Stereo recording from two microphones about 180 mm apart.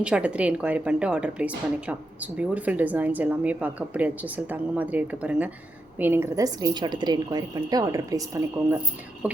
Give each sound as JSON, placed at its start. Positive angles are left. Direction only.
{"t": 0.0, "sound": "a woman's voice", "side_deg": -5}
{"t": 9.2, "sound": "a woman's voice", "side_deg": -5}